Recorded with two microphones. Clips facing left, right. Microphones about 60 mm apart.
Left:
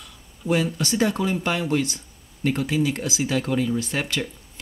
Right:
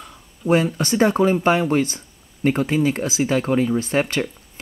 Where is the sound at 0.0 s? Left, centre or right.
Right.